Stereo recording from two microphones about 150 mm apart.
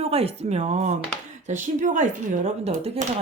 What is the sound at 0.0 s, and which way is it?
Speech, 40° right (ahead or behind).